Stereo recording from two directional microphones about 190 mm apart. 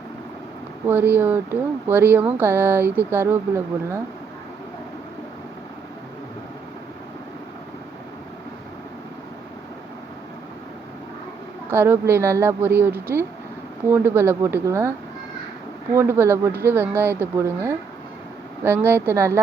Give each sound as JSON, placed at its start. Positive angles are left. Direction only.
{"t": 0.9, "sound": "speech", "side_deg": -10}
{"t": 11.7, "sound": "speech", "side_deg": -10}
{"t": 16.0, "sound": "speech", "side_deg": -10}